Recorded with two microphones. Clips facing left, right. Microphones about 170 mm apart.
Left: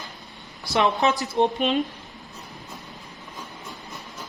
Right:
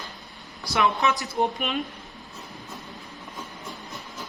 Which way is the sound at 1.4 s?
30° left (ahead or behind).